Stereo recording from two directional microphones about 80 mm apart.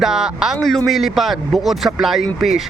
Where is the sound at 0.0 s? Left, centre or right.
Centre.